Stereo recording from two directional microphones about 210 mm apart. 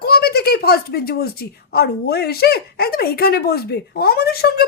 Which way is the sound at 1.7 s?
50° left (ahead or behind).